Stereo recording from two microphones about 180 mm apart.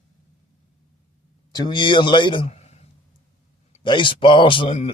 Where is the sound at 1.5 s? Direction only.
25° left (ahead or behind).